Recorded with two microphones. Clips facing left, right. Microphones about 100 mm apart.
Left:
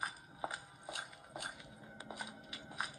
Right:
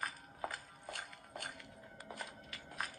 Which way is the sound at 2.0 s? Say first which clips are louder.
Even; 15° left (ahead or behind).